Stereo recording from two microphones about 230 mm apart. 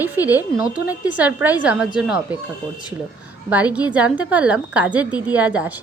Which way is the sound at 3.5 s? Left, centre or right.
Centre.